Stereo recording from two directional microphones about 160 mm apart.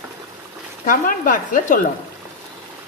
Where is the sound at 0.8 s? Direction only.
55° left (ahead or behind).